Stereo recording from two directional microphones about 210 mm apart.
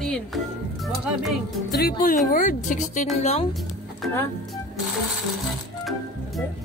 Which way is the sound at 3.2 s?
30° left (ahead or behind).